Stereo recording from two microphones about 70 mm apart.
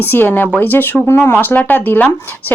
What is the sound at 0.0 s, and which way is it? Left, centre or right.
Speech, left.